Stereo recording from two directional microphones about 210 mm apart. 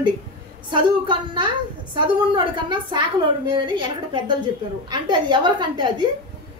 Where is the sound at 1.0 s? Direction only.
20° right (ahead or behind).